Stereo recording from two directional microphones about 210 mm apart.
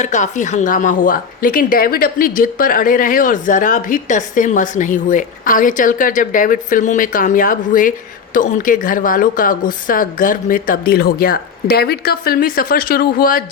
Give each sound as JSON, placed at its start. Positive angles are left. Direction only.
{"t": 0.0, "sound": "a woman's voice", "side_deg": 35}